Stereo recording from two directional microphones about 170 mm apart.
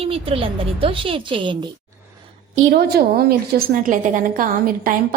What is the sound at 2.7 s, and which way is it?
A woman's voice, 65° right (ahead or behind).